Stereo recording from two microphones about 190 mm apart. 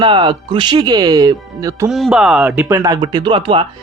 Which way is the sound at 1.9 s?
Centre (ahead or behind).